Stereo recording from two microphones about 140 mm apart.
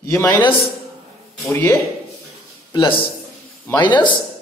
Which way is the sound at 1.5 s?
15° left (ahead or behind).